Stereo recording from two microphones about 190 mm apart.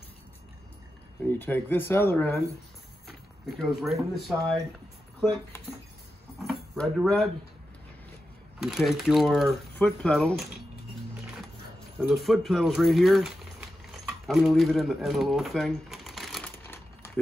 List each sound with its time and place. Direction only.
1.2 s speech: 10° left (ahead or behind)
3.4 s speech: centre (ahead or behind)
6.4 s speech: centre (ahead or behind)
8.5 s speech: centre (ahead or behind)
12.0 s speech: centre (ahead or behind)
16.5 s crumpling: 10° left (ahead or behind)